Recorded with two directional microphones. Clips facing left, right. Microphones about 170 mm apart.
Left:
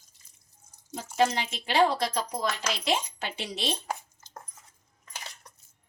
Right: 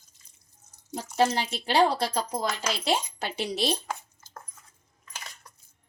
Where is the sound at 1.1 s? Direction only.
35° right (ahead or behind).